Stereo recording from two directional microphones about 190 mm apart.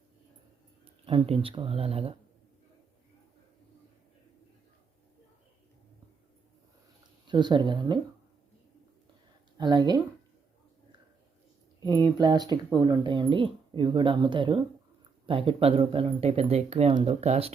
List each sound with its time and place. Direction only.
0.9 s speech: 30° right (ahead or behind)
7.3 s speech: 25° right (ahead or behind)
9.6 s speech: 25° right (ahead or behind)
11.8 s speech: 20° right (ahead or behind)